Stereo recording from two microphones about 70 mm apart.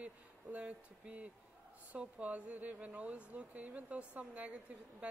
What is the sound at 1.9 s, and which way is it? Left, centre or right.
Speech, centre.